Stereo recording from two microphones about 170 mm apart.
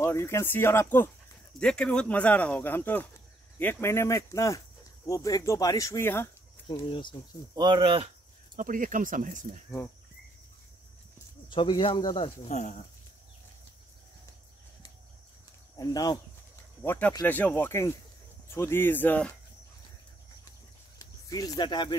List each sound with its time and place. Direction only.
0.0 s speech: 15° left (ahead or behind)
6.7 s speech: 25° left (ahead or behind)
7.5 s speech: 25° right (ahead or behind)
8.5 s speech: 50° right (ahead or behind)
11.5 s speech: 30° left (ahead or behind)
15.8 s speech: 20° left (ahead or behind)
16.8 s speech: 10° left (ahead or behind)
21.0 s speech: 20° left (ahead or behind)